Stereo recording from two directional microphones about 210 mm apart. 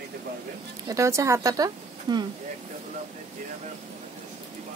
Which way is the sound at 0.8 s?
15° right (ahead or behind).